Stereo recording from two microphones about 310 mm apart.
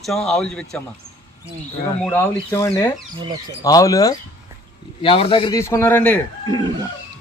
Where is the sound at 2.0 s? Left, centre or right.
Centre.